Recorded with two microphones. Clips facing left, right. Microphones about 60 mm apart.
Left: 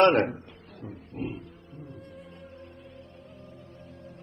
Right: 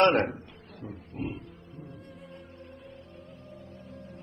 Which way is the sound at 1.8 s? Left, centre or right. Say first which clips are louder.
Left 2 dB; centre.